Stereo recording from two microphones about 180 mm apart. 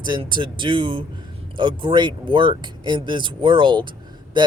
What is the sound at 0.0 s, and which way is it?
Speech, 25° right (ahead or behind).